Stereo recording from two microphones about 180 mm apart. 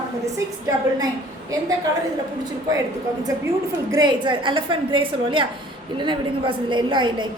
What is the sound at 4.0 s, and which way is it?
A woman's voice, 25° right (ahead or behind).